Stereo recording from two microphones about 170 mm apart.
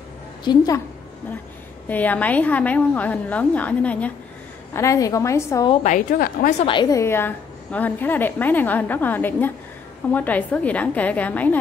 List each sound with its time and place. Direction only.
0.5 s a woman's voice: 25° left (ahead or behind)
1.9 s a woman's voice: 10° left (ahead or behind)
5.9 s a woman's voice: 55° left (ahead or behind)
6.6 s a woman's voice: 25° left (ahead or behind); by 11.6 s 10° left (ahead or behind)